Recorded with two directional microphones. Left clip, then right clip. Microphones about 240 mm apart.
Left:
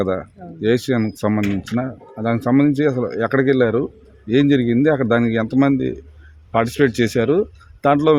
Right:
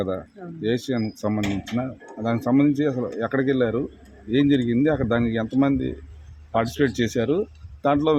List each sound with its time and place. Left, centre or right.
0.0 s speech: left